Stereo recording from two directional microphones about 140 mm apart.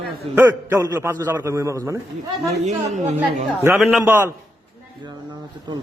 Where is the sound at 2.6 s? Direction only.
55° right (ahead or behind).